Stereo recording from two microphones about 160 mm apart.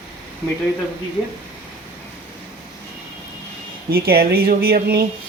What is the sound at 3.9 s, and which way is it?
Speech, 70° right (ahead or behind).